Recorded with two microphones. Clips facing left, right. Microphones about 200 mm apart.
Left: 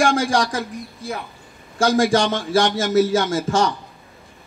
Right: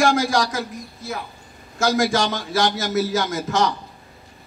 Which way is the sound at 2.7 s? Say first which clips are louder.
Left 5 dB; 30° left (ahead or behind).